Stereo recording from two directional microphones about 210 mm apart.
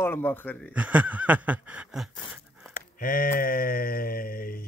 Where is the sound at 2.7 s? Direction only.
40° left (ahead or behind).